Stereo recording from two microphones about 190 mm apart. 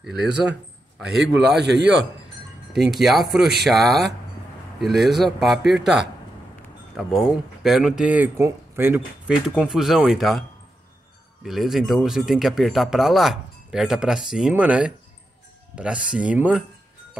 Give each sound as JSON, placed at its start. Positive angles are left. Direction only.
{"t": 0.0, "sound": "speech", "side_deg": 0}
{"t": 1.6, "sound": "a man's voice", "side_deg": -65}
{"t": 2.7, "sound": "speech", "side_deg": 0}
{"t": 7.0, "sound": "speech", "side_deg": 0}
{"t": 11.4, "sound": "speech", "side_deg": 0}